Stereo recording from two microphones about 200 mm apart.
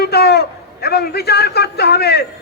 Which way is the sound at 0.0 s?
50° left (ahead or behind).